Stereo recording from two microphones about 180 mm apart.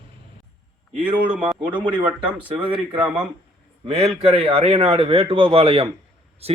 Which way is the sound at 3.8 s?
35° right (ahead or behind).